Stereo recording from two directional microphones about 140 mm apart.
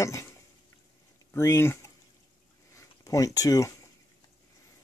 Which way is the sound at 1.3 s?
20° left (ahead or behind).